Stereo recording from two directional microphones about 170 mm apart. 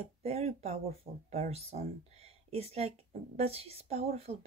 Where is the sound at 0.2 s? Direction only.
35° right (ahead or behind).